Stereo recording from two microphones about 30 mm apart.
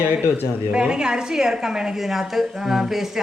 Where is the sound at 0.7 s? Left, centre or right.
Right.